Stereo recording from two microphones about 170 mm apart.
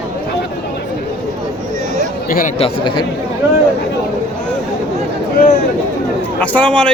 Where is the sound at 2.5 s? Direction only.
30° left (ahead or behind).